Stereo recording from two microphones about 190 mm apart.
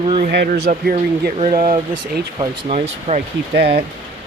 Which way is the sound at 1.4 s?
25° right (ahead or behind).